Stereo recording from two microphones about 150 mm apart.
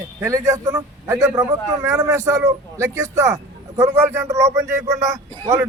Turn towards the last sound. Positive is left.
turn(degrees=-20)  # may be behind; listen again after turning